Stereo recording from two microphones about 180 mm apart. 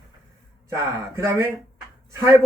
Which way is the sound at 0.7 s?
15° right (ahead or behind).